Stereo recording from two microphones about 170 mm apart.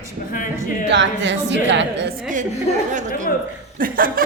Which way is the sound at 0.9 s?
90° right.